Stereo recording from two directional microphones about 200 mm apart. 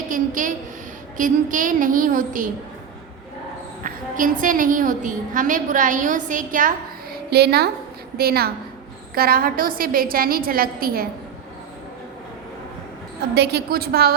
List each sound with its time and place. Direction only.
0.1 s a woman's voice: 40° right (ahead or behind)
3.8 s a woman's voice: 40° right (ahead or behind)
13.3 s a woman's voice: 55° right (ahead or behind)